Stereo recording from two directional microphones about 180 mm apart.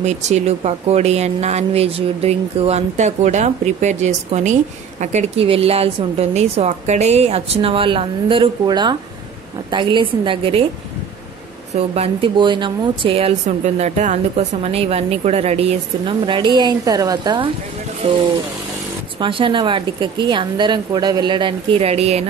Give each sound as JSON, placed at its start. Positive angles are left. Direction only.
{"t": 0.0, "sound": "speech", "side_deg": -40}
{"t": 11.7, "sound": "speech", "side_deg": -35}